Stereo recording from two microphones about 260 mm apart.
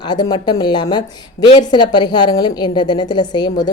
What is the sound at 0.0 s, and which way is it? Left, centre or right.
A woman's voice, centre.